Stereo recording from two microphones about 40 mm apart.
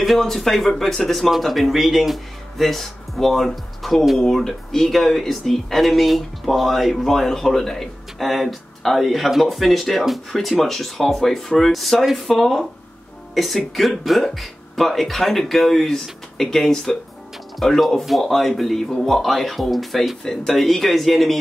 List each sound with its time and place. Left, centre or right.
0.2 s speech: centre